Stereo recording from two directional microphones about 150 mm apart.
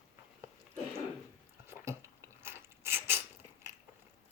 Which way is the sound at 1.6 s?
20° right (ahead or behind).